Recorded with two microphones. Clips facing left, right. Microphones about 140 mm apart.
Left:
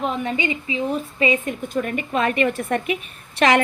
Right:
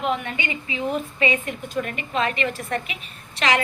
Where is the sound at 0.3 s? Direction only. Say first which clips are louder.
Left 6 dB; 35° left (ahead or behind).